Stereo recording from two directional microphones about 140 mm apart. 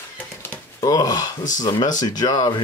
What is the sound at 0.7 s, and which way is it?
Speech, 25° left (ahead or behind).